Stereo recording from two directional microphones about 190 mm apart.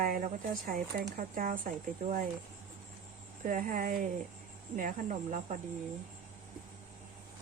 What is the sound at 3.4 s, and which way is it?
Speech, 45° right (ahead or behind).